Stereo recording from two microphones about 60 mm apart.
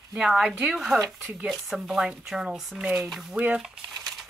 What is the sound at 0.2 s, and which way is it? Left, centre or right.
Speech, centre.